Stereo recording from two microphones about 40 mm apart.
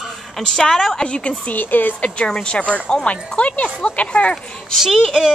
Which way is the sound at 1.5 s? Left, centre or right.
Left.